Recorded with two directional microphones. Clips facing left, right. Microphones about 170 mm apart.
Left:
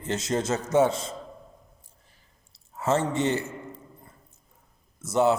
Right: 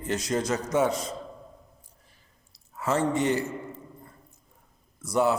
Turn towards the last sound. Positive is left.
turn(degrees=25)  # may be behind; listen again after turning